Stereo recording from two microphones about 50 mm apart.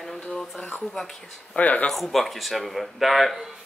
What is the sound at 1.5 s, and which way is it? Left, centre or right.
Speech, left.